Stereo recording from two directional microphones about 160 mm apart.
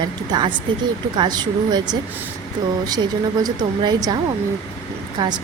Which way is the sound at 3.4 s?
25° right (ahead or behind).